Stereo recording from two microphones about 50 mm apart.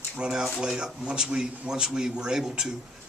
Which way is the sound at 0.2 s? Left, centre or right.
Centre.